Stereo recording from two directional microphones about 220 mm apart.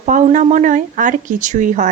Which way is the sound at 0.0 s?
35° right (ahead or behind).